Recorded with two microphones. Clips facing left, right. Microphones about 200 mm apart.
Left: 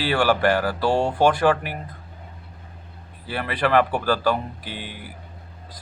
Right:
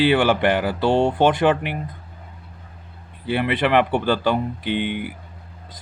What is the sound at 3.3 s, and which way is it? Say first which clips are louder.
Speech: right 3 dB; 20° right (ahead or behind).